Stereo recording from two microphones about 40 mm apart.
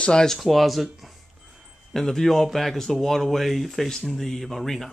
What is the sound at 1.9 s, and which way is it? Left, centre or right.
Speech, centre.